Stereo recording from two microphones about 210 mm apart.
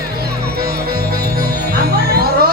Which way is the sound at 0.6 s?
45° right (ahead or behind).